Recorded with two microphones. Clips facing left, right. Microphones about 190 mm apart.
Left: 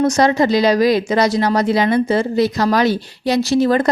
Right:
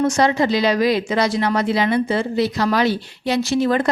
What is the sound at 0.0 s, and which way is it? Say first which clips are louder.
Speech: left 3 dB; 40° left (ahead or behind).